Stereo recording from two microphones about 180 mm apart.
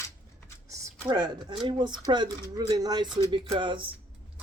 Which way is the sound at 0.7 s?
25° right (ahead or behind).